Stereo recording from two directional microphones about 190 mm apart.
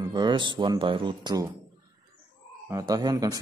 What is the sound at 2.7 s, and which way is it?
Speech, 20° right (ahead or behind).